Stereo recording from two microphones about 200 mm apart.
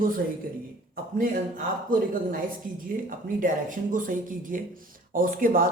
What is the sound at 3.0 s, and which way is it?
Speech, 40° right (ahead or behind).